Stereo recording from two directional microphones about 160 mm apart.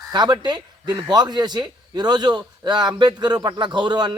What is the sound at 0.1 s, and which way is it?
Speech, 25° right (ahead or behind).